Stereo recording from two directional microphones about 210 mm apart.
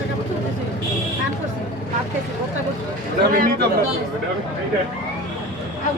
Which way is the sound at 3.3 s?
45° right (ahead or behind).